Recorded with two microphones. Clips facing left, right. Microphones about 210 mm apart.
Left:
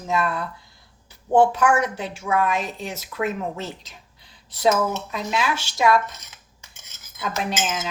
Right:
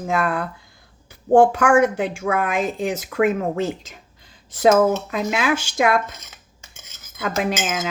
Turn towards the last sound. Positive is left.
turn(degrees=-55)  # may be behind; listen again after turning